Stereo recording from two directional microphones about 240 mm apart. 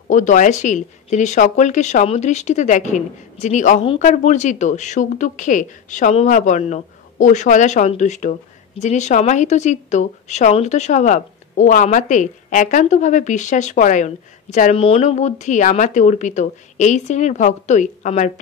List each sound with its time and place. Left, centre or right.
0.1 s speech: left